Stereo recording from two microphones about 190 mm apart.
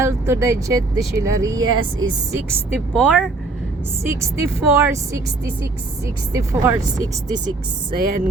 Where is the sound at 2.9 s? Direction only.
Centre (ahead or behind).